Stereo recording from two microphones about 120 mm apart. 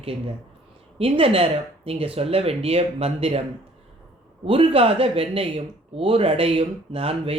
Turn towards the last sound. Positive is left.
turn(degrees=-55)  # may be behind; listen again after turning